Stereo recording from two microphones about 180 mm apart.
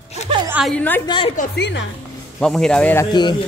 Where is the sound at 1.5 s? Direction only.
70° left (ahead or behind).